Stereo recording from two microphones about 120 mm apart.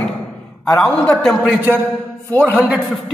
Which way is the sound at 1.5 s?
15° right (ahead or behind).